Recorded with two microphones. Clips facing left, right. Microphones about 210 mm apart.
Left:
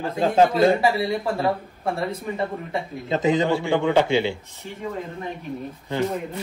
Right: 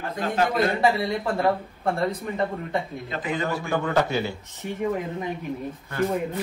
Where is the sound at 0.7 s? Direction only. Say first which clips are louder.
Left 1 dB; centre (ahead or behind).